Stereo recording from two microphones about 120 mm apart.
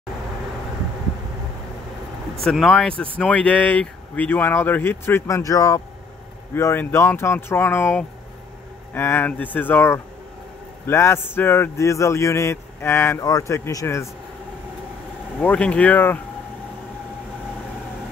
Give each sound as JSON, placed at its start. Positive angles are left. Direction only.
{"t": 2.4, "sound": "speech", "side_deg": 0}
{"t": 15.4, "sound": "speech", "side_deg": 10}